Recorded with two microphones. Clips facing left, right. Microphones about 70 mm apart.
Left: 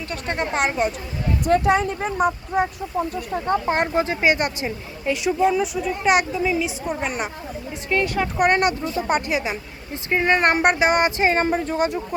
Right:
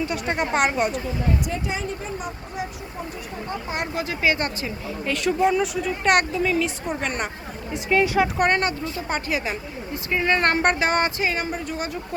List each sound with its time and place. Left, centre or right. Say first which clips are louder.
0.0 s a woman's voice: right 1 dB; centre
1.5 s speech: left 10 dB; left
3.8 s speech: left 6 dB; left
5.4 s a woman's voice: even; centre
8.5 s speech: left 4 dB; left
9.9 s speech: left 3 dB; left
11.2 s speech: left 6 dB; left